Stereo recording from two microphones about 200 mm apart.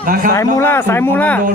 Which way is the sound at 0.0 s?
45° right (ahead or behind).